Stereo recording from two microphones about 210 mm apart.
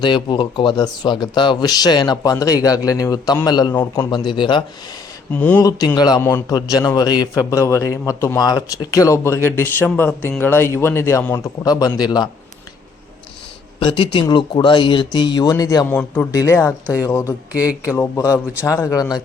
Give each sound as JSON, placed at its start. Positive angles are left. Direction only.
{"t": 0.0, "sound": "speech", "side_deg": 20}
{"t": 3.7, "sound": "a man's voice", "side_deg": 10}
{"t": 4.1, "sound": "speech", "side_deg": 20}
{"t": 5.3, "sound": "a man's voice", "side_deg": 5}
{"t": 13.7, "sound": "a man's voice", "side_deg": 25}
{"t": 17.5, "sound": "speech", "side_deg": -5}
{"t": 17.8, "sound": "a man's voice", "side_deg": 15}